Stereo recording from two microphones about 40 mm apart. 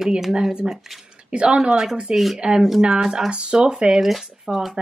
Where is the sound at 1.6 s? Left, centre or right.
Centre.